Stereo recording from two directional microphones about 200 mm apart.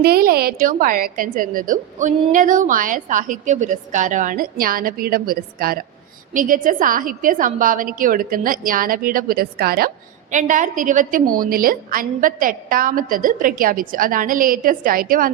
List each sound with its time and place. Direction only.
0.0 s a woman's voice: 50° right (ahead or behind)